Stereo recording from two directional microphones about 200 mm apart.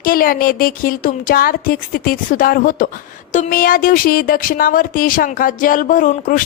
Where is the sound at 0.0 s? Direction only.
45° left (ahead or behind).